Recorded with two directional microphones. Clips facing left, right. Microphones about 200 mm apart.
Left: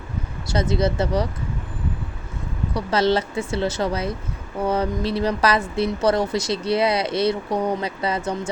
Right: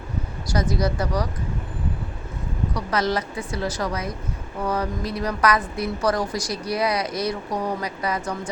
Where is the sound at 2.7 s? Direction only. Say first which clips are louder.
Left 5 dB; 30° left (ahead or behind).